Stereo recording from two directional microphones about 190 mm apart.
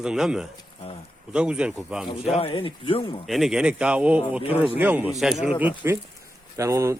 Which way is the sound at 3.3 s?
Centre (ahead or behind).